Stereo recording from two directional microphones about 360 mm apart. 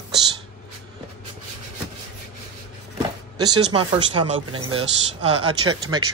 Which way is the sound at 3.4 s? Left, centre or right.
Centre.